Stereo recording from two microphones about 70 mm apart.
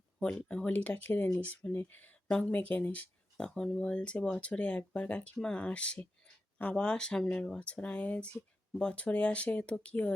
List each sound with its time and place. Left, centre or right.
0.4 s speech: centre
3.4 s speech: centre
7.6 s speech: centre